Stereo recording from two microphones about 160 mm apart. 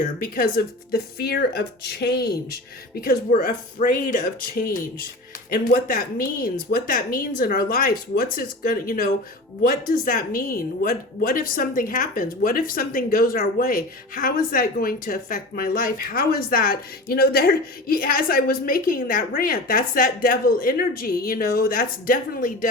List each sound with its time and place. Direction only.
0.0 s a woman's voice: 55° left (ahead or behind)